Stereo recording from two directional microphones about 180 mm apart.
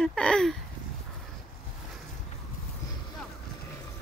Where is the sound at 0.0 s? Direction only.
5° left (ahead or behind).